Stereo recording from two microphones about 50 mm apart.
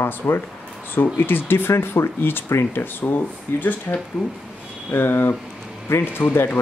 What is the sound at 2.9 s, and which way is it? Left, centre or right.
Speech, left.